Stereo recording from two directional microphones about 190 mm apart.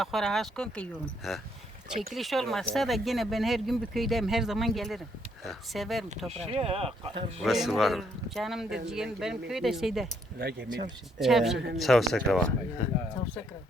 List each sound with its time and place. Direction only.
0.0 s speech: centre (ahead or behind)
6.3 s speech: 30° right (ahead or behind)
7.4 s speech: centre (ahead or behind)
10.3 s speech: 55° right (ahead or behind)
11.2 s speech: centre (ahead or behind)
11.5 s speech: 65° right (ahead or behind)
11.8 s speech: centre (ahead or behind)